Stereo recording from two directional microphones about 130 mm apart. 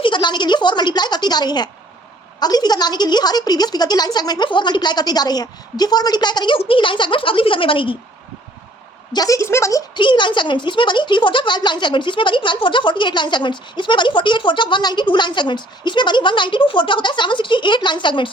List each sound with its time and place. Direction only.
0.0 s a woman's voice: 35° left (ahead or behind)
9.1 s a woman's voice: 25° left (ahead or behind)
9.9 s speech: 35° left (ahead or behind)